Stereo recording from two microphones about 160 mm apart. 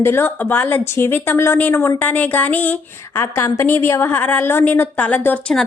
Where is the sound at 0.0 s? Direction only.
15° left (ahead or behind).